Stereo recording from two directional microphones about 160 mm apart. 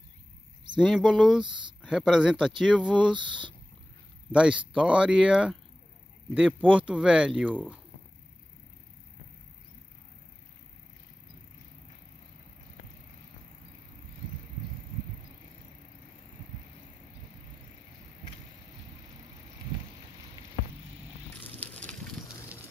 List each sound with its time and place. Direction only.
0.7 s speech: centre (ahead or behind)
3.2 s speech: 30° right (ahead or behind)
4.3 s speech: 5° right (ahead or behind)
21.4 s a sound: 10° left (ahead or behind)